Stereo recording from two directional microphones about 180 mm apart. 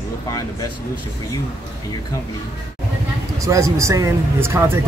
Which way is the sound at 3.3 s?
15° right (ahead or behind).